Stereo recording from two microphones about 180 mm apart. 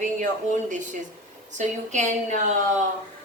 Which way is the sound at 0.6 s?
45° right (ahead or behind).